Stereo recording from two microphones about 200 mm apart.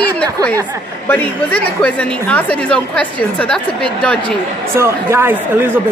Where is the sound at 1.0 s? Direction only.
10° left (ahead or behind).